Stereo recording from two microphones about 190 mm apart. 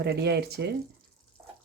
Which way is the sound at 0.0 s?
60° right (ahead or behind).